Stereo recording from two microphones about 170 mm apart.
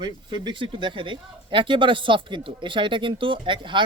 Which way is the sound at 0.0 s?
25° right (ahead or behind).